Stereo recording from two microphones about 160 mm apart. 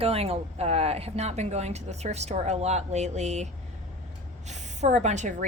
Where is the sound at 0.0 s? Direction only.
40° right (ahead or behind).